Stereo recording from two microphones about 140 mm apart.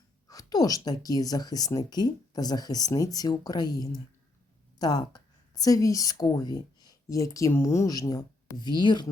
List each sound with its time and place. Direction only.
0.3 s a woman's voice: 25° left (ahead or behind)